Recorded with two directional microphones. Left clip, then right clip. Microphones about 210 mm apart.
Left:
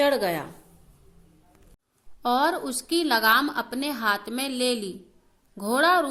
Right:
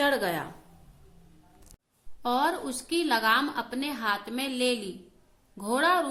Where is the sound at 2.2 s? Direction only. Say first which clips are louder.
Left 4 dB; 25° left (ahead or behind).